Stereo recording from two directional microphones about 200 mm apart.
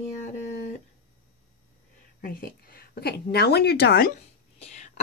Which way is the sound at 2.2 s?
45° left (ahead or behind).